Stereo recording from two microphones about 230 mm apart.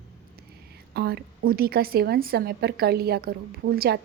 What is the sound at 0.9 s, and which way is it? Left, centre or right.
A woman's voice, right.